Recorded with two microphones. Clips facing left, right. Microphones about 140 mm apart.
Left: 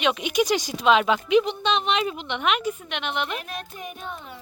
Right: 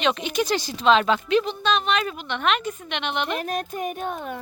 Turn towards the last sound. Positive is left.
turn(degrees=-55)  # may be behind; listen again after turning